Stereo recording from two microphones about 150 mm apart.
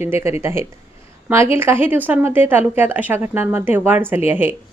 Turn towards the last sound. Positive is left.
turn(degrees=-15)  # may be behind; listen again after turning